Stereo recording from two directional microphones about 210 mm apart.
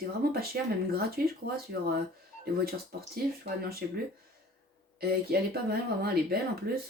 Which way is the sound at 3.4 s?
45° right (ahead or behind).